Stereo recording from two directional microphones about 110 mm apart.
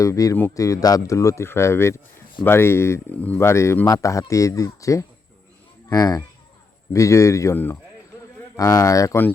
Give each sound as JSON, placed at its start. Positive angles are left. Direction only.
{"t": 0.0, "sound": "speech", "side_deg": 30}
{"t": 3.2, "sound": "speech", "side_deg": 15}
{"t": 3.4, "sound": "speech", "side_deg": 25}
{"t": 7.5, "sound": "speech", "side_deg": 15}
{"t": 8.5, "sound": "speech", "side_deg": 30}